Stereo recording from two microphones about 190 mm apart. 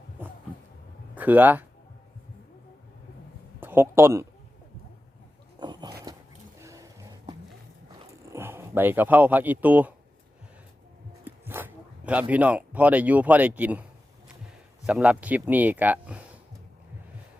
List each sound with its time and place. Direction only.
1.1 s speech: 10° right (ahead or behind)
3.6 s speech: 10° right (ahead or behind)
5.5 s dog: 25° right (ahead or behind)
6.6 s music: 15° right (ahead or behind)
8.3 s speech: 15° right (ahead or behind)
11.3 s zipper: 10° right (ahead or behind)
12.3 s speech: 5° right (ahead or behind)
14.8 s speech: 5° right (ahead or behind)